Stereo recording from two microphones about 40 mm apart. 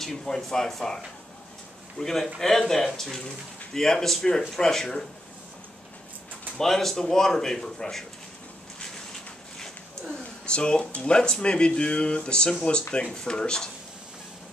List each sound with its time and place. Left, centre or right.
0.0 s a man's voice: centre
6.6 s a man's voice: centre
10.4 s speech: left